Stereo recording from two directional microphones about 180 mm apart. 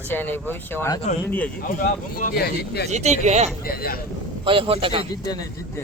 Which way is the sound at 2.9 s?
40° right (ahead or behind).